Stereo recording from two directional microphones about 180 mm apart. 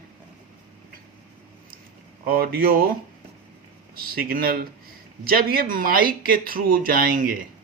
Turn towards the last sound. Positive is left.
turn(degrees=-50)  # may be behind; listen again after turning